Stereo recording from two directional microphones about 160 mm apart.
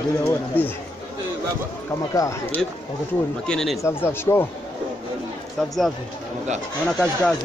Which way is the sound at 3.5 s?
5° left (ahead or behind).